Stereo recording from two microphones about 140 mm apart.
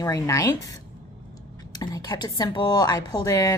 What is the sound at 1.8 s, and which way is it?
Speech, 25° left (ahead or behind).